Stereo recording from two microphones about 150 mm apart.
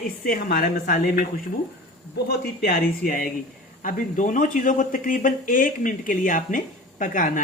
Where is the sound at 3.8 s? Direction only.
60° left (ahead or behind).